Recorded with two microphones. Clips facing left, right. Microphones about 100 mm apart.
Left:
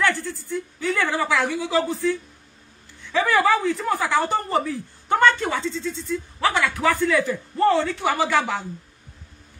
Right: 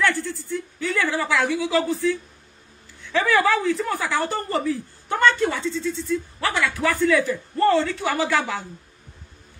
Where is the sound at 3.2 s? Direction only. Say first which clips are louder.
Even; 5° left (ahead or behind).